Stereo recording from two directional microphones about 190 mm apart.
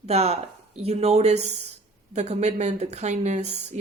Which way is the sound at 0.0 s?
35° right (ahead or behind).